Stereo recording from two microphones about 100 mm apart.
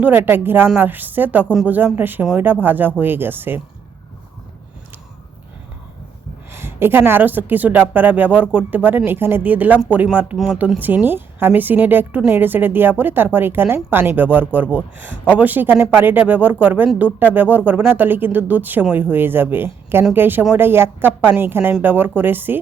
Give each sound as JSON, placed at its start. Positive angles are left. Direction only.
{"t": 0.0, "sound": "a woman's voice", "side_deg": -20}
{"t": 6.5, "sound": "speech", "side_deg": -25}
{"t": 10.3, "sound": "speech", "side_deg": -5}
{"t": 10.8, "sound": "a woman's voice", "side_deg": -20}